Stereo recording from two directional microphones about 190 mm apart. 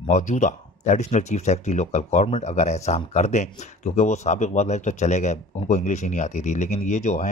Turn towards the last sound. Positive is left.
turn(degrees=40)  # may be behind; listen again after turning